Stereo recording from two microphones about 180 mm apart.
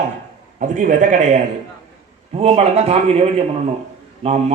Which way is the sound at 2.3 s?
35° right (ahead or behind).